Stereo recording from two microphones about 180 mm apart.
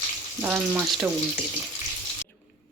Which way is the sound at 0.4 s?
10° right (ahead or behind).